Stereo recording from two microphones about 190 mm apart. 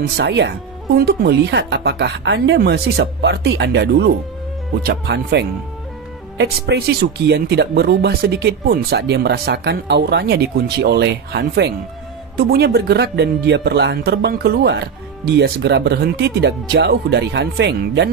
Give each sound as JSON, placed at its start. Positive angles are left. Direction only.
{"t": 0.0, "sound": "speech", "side_deg": -65}